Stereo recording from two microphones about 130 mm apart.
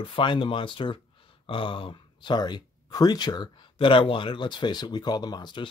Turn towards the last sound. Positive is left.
turn(degrees=35)  # may be behind; listen again after turning